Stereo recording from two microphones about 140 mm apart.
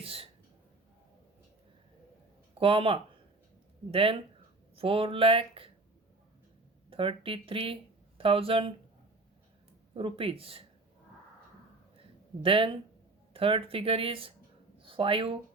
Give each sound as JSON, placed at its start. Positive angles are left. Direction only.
{"t": 0.0, "sound": "a sound", "side_deg": -45}
{"t": 2.6, "sound": "speech", "side_deg": -40}
{"t": 6.9, "sound": "speech", "side_deg": -40}
{"t": 9.9, "sound": "speech", "side_deg": -40}
{"t": 11.9, "sound": "a sound", "side_deg": -40}
{"t": 13.3, "sound": "speech", "side_deg": -40}